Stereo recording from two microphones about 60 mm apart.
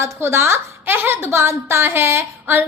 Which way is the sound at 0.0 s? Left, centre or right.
Right.